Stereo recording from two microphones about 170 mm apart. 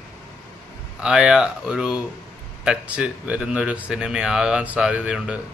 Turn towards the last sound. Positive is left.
turn(degrees=-5)  # may be behind; listen again after turning